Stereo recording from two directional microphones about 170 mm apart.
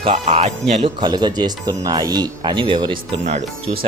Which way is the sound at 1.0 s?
25° right (ahead or behind).